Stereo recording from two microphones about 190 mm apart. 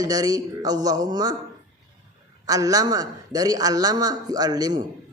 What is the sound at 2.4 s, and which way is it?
A man's voice, 20° right (ahead or behind).